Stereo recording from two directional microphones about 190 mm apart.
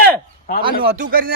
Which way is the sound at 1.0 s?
50° right (ahead or behind).